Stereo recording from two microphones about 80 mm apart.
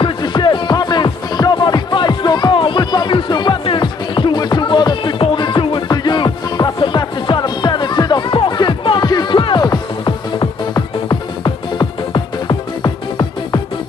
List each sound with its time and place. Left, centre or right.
0.0 s music: left
5.9 s music: left
9.7 s music: left